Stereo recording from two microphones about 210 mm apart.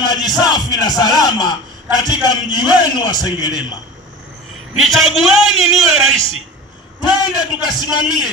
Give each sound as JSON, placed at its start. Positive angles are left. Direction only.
{"t": 0.0, "sound": "a man's voice", "side_deg": 20}
{"t": 4.8, "sound": "a man's voice", "side_deg": 0}
{"t": 7.2, "sound": "a man's voice", "side_deg": 20}